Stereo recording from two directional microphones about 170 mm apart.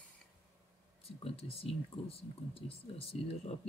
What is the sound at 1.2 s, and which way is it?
Speech, 35° left (ahead or behind).